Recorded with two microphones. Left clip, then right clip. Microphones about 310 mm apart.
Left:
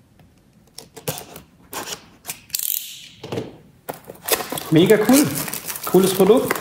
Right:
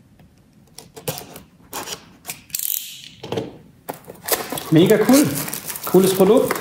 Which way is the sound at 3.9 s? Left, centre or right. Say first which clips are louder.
Left 1 dB; centre.